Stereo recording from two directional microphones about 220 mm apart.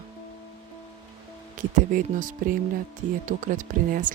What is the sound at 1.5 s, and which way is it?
Speech, 35° right (ahead or behind).